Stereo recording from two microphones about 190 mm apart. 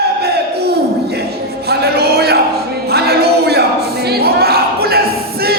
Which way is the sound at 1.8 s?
55° right (ahead or behind).